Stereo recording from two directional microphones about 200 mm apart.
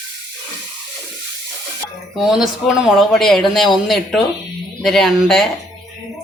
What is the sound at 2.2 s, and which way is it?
Speech, 5° right (ahead or behind).